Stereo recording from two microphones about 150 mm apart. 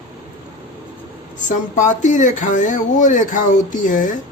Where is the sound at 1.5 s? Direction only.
55° left (ahead or behind).